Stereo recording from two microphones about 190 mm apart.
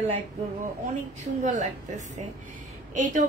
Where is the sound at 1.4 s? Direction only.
40° right (ahead or behind).